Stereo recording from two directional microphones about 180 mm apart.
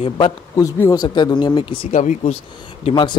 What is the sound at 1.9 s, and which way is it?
Speech, 40° left (ahead or behind).